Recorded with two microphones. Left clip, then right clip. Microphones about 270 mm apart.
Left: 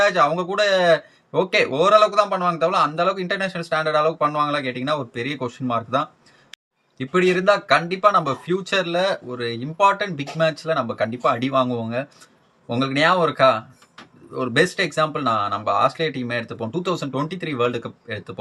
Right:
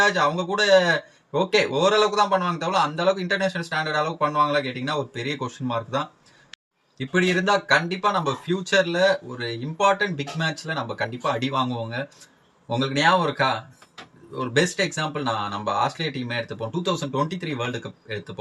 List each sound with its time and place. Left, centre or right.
0.0 s speech: centre